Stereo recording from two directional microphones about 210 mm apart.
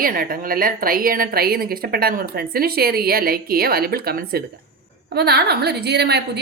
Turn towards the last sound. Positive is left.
turn(degrees=-50)  # may be behind; listen again after turning